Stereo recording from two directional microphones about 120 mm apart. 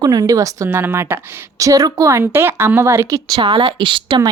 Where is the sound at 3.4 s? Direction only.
45° right (ahead or behind).